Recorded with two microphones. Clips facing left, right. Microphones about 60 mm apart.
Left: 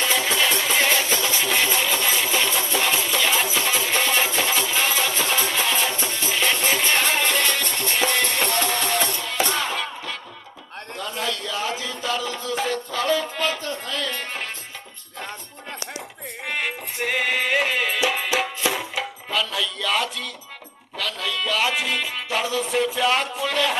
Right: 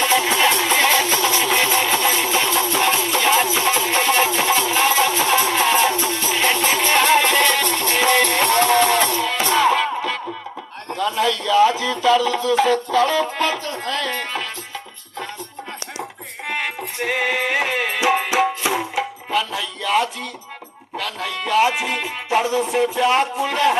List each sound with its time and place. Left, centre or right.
0.3 s music: right
0.5 s music: right
1.1 s vehicle: right
1.9 s music: right
3.2 s music: right
3.4 s music: right
6.3 s music: right
11.0 s music: right
16.5 s music: right
18.3 s music: centre
21.0 s music: right
22.7 s speech: centre